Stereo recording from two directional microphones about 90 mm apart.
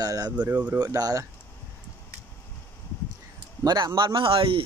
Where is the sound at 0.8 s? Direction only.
40° right (ahead or behind).